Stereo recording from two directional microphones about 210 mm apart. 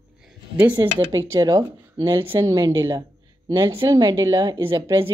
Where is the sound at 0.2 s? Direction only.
5° right (ahead or behind).